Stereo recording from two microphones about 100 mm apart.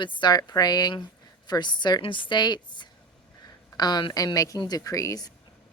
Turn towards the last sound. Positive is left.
turn(degrees=35)  # may be behind; listen again after turning